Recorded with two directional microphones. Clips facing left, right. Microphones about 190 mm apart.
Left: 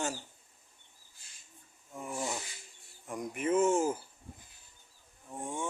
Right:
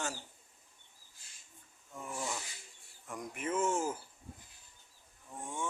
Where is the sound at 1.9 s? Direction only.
20° left (ahead or behind).